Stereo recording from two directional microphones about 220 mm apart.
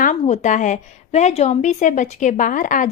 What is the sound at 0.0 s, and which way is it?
A woman's voice, 35° left (ahead or behind).